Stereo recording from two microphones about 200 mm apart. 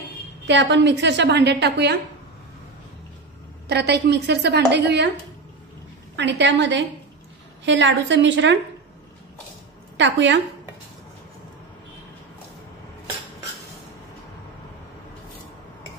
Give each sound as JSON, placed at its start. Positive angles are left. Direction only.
{"t": 0.5, "sound": "a woman's voice", "side_deg": -60}
{"t": 3.6, "sound": "a woman's voice", "side_deg": -55}
{"t": 6.1, "sound": "a woman's voice", "side_deg": -60}
{"t": 9.9, "sound": "a woman's voice", "side_deg": -65}